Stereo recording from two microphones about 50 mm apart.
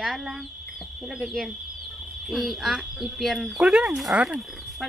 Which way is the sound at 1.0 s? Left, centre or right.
Centre.